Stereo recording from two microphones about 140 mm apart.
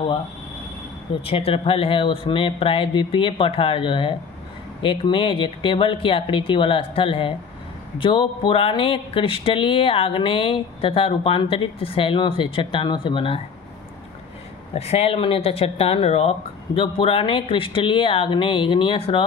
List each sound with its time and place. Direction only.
1.2 s speech: 45° left (ahead or behind)
14.7 s speech: 45° left (ahead or behind)